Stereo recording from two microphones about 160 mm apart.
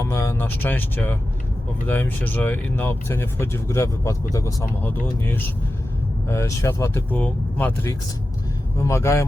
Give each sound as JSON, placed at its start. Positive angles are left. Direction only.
{"t": 0.0, "sound": "vehicle", "side_deg": 20}
{"t": 1.9, "sound": "speech", "side_deg": 10}